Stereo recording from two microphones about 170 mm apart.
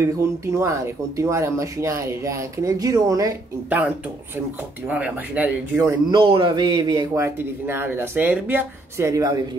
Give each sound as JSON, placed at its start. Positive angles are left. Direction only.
{"t": 0.0, "sound": "speech", "side_deg": -15}
{"t": 4.8, "sound": "speech", "side_deg": -10}
{"t": 6.0, "sound": "speech", "side_deg": -30}